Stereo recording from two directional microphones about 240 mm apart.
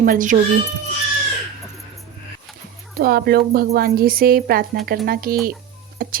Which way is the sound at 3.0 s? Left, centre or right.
Right.